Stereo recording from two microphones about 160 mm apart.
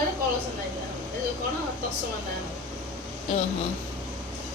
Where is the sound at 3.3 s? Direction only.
40° left (ahead or behind).